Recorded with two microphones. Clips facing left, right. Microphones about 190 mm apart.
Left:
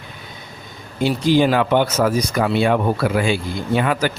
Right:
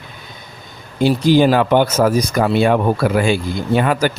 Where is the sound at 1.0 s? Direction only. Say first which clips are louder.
Right 3 dB; 40° right (ahead or behind).